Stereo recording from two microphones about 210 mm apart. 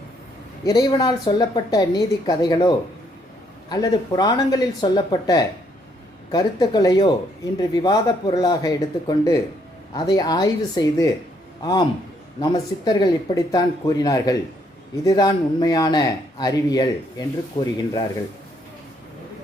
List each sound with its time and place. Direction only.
0.6 s speech: 20° left (ahead or behind)